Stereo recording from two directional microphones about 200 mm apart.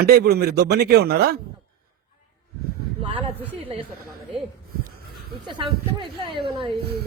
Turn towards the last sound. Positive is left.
turn(degrees=-25)  # may be behind; listen again after turning